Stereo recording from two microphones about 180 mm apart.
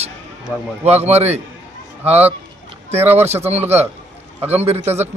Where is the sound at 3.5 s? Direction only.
35° right (ahead or behind).